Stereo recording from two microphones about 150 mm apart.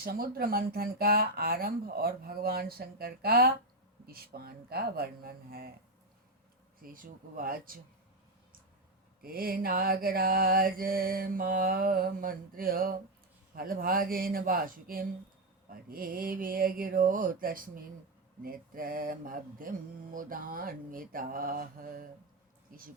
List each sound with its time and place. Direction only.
0.0 s speech: 85° right
6.7 s mantra: 70° right (ahead or behind)
9.2 s mantra: 75° right (ahead or behind)